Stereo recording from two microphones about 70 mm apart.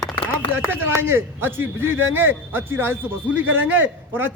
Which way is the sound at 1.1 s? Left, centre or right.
Right.